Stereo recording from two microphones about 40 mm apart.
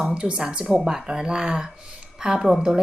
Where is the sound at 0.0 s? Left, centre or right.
Right.